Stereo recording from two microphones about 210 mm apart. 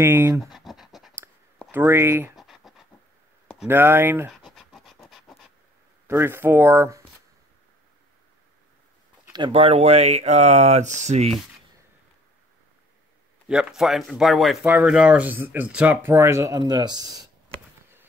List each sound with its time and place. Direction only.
0.0 s speech: 10° right (ahead or behind)
0.4 s scratch: centre (ahead or behind)
1.7 s speech: 10° right (ahead or behind)
2.3 s scratch: centre (ahead or behind)
3.6 s speech: 10° right (ahead or behind)
4.5 s pant: centre (ahead or behind)
6.0 s speech: 10° right (ahead or behind)
9.3 s speech: 25° right (ahead or behind)
13.5 s speech: 5° right (ahead or behind)